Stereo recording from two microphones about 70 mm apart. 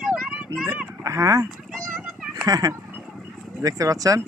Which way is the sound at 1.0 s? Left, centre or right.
Right.